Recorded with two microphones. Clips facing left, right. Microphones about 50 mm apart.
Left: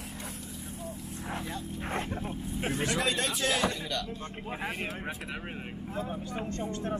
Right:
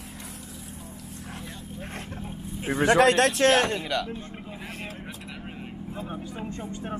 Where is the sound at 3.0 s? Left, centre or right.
Right.